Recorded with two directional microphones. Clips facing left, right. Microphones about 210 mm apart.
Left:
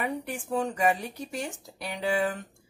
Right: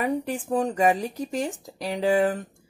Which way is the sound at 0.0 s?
35° right (ahead or behind).